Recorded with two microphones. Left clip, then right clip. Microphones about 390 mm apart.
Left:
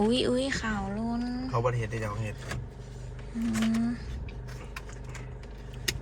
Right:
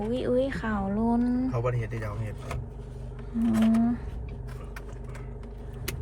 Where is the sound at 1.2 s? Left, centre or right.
Right.